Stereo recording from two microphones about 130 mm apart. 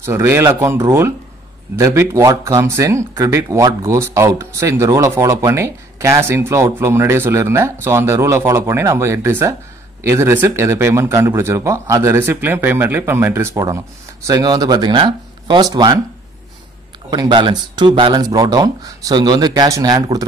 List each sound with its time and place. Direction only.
0.0 s speech: 20° right (ahead or behind)
17.1 s speech: 35° right (ahead or behind)